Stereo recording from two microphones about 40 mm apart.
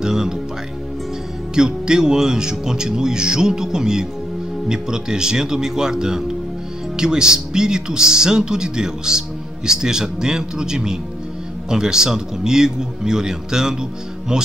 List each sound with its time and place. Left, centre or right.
0.0 s music: centre
1.5 s speech: centre